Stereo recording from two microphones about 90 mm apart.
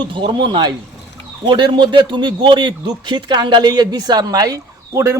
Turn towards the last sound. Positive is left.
turn(degrees=-35)  # may be behind; listen again after turning